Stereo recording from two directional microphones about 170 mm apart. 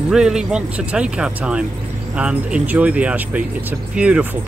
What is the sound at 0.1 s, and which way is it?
Speech, 5° right (ahead or behind).